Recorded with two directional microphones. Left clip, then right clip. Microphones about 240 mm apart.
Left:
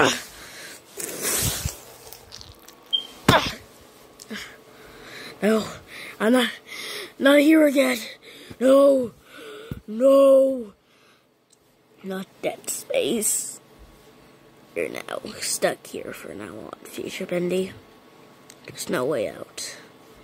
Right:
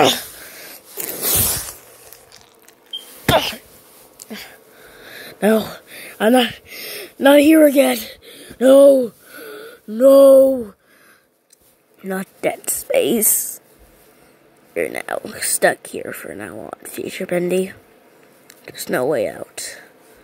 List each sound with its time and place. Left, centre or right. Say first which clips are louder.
0.0 s a sound: right 6 dB; centre
1.2 s zipper: right 4 dB; right
3.3 s a sound: right 3 dB; centre
12.1 s a woman's voice: right 7 dB; centre
14.7 s speech: right 6 dB; centre
18.7 s speech: right 6 dB; centre